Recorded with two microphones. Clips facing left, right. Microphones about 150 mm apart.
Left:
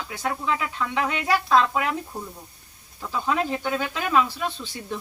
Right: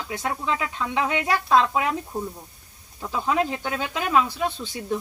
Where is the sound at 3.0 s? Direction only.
15° right (ahead or behind).